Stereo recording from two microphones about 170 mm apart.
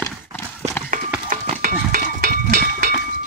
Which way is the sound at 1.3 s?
55° right (ahead or behind).